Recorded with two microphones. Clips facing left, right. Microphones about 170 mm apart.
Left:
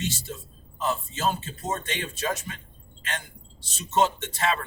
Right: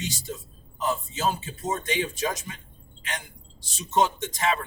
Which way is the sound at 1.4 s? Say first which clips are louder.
Right 1 dB; 15° right (ahead or behind).